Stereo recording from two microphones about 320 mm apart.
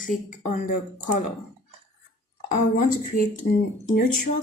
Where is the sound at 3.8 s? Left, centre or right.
Left.